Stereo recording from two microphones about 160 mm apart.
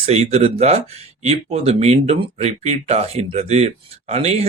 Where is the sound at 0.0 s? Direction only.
40° right (ahead or behind).